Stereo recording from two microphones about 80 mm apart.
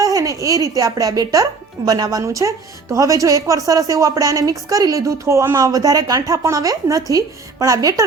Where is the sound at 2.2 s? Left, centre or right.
Right.